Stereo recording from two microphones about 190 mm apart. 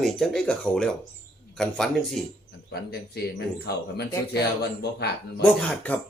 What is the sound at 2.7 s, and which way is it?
Speech, 60° left (ahead or behind).